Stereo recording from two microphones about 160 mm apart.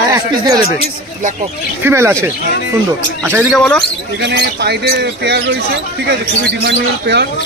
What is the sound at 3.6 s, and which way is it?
Speech, 5° left (ahead or behind).